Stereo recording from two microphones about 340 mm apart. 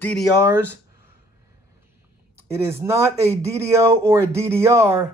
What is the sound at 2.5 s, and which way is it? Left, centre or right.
Speech, centre.